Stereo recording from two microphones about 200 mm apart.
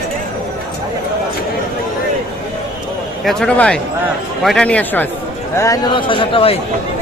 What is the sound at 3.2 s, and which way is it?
A man's voice, 5° left (ahead or behind).